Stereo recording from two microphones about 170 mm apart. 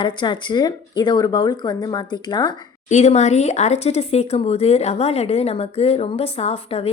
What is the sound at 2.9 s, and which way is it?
Speech, 40° left (ahead or behind).